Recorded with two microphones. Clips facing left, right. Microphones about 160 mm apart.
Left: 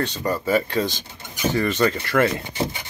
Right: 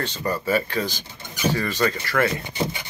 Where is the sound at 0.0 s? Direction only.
15° left (ahead or behind).